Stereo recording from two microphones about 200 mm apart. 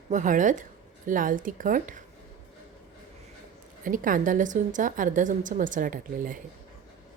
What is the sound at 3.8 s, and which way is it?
A woman's voice, 45° right (ahead or behind).